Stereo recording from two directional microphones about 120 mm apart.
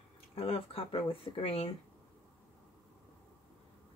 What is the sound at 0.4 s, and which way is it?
Speech, 55° left (ahead or behind).